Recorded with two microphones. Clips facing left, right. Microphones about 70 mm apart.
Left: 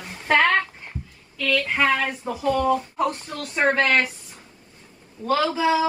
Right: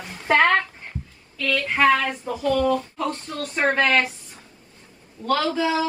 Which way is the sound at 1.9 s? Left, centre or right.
Centre.